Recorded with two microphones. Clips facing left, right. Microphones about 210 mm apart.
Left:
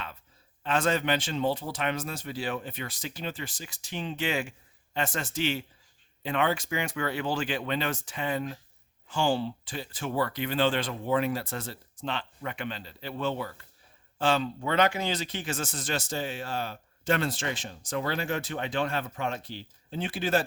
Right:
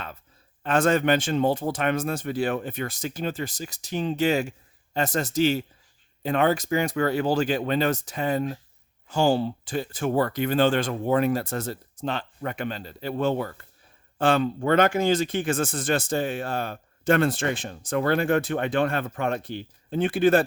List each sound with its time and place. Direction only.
0.6 s a man's voice: 50° right (ahead or behind)